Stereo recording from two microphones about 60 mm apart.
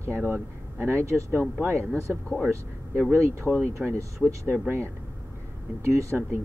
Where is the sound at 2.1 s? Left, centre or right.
Centre.